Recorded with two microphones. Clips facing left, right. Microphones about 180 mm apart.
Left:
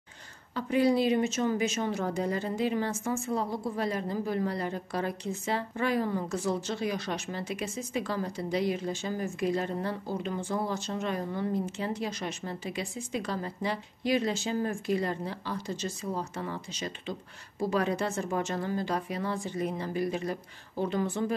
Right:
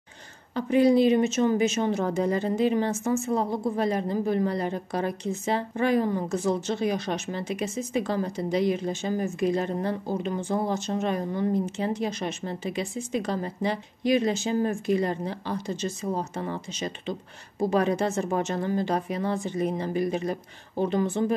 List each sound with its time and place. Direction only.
0.6 s a woman's voice: 20° right (ahead or behind)